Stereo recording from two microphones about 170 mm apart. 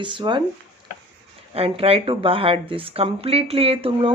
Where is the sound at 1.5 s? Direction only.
35° right (ahead or behind).